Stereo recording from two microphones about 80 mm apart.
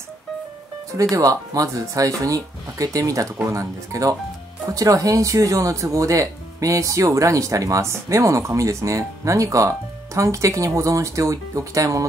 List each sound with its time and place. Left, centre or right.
1.1 s speech: right